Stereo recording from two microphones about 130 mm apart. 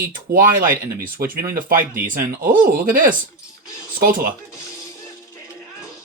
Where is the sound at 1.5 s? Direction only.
90° right.